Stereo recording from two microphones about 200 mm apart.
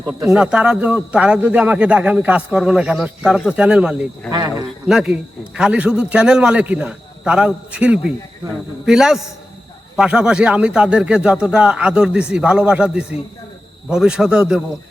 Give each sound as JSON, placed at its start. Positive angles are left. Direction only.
{"t": 0.3, "sound": "a man's voice", "side_deg": -5}
{"t": 4.3, "sound": "speech", "side_deg": -20}
{"t": 4.9, "sound": "a man's voice", "side_deg": -5}